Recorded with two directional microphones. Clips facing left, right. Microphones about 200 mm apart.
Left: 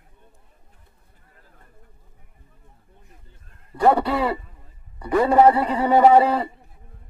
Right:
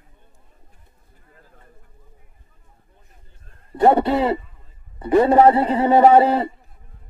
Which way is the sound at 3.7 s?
25° right (ahead or behind).